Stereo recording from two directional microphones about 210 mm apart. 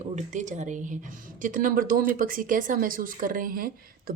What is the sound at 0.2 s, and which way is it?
A woman's voice, 35° right (ahead or behind).